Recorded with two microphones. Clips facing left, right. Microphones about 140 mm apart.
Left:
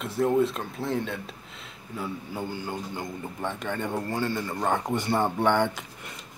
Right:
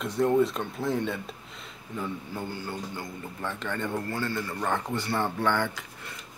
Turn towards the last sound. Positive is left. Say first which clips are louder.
# left 4 dB
turn(degrees=20)  # may be behind; listen again after turning